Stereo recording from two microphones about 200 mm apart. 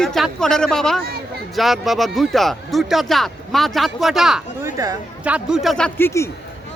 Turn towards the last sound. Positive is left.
turn(degrees=10)  # may be behind; listen again after turning